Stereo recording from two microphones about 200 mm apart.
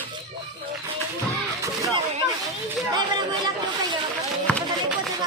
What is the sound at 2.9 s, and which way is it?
Chatter, 20° right (ahead or behind).